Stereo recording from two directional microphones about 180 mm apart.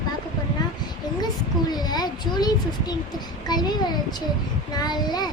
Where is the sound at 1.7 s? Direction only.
20° left (ahead or behind).